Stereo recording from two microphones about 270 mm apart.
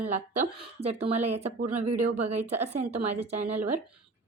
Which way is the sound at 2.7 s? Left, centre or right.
Right.